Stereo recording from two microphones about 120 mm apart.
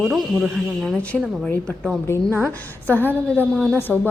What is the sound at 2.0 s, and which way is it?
A woman's voice, 20° left (ahead or behind).